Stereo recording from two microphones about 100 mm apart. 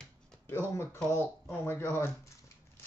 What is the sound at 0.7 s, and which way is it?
Speech, 25° left (ahead or behind).